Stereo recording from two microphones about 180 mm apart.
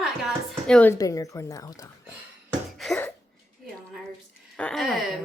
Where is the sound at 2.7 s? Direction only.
Centre (ahead or behind).